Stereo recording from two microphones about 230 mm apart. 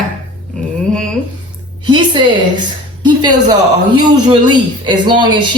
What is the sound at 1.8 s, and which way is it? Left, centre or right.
Speech, centre.